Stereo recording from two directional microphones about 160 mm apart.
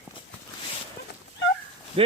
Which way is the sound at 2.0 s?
35° right (ahead or behind).